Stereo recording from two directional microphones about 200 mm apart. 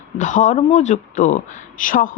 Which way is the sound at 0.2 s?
40° left (ahead or behind).